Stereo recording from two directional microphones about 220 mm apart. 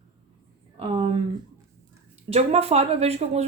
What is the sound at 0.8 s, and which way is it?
Speech, 25° right (ahead or behind).